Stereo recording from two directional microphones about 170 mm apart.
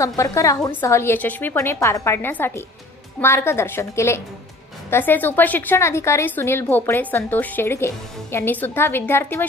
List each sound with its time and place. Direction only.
0.0 s a woman's voice: 20° left (ahead or behind)